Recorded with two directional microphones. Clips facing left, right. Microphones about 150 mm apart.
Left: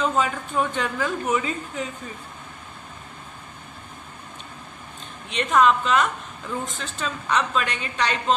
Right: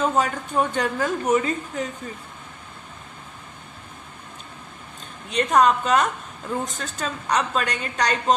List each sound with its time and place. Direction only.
0.2 s a woman's voice: 40° right (ahead or behind)
5.3 s a woman's voice: 40° right (ahead or behind)